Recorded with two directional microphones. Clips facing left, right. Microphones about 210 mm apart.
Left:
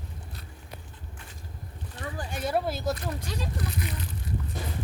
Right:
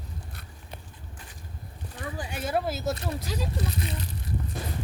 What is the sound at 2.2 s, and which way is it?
Speech, 5° right (ahead or behind).